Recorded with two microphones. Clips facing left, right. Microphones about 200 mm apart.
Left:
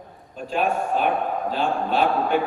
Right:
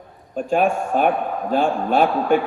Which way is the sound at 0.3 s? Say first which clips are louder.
Right 5 dB; 50° right (ahead or behind).